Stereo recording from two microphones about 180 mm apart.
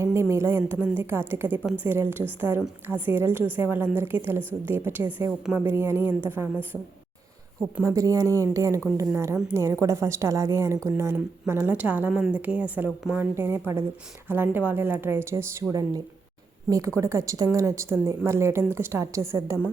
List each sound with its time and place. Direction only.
0.0 s a woman's voice: 15° right (ahead or behind)
16.6 s a woman's voice: 20° right (ahead or behind)